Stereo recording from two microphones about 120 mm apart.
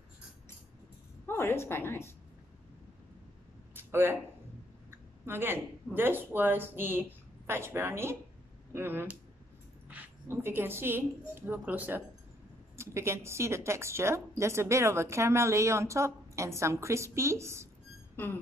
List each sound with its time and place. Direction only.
1.2 s a woman's voice: 20° left (ahead or behind)
3.7 s a sound: 20° right (ahead or behind)
5.2 s a woman's voice: 20° right (ahead or behind)